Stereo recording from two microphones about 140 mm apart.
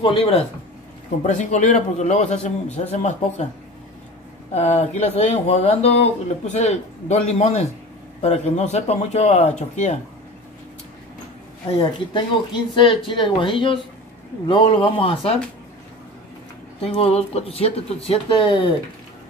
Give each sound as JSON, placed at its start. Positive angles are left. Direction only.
{"t": 0.0, "sound": "speech", "side_deg": 40}
{"t": 1.2, "sound": "speech", "side_deg": 60}
{"t": 4.6, "sound": "speech", "side_deg": 55}
{"t": 11.7, "sound": "speech", "side_deg": 40}
{"t": 16.8, "sound": "speech", "side_deg": 45}